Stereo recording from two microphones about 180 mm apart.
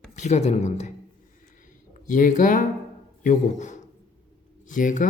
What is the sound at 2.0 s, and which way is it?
Speech, 45° left (ahead or behind).